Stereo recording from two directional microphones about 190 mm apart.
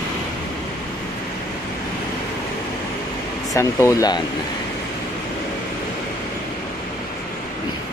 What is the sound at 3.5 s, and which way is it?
Speech, 15° left (ahead or behind).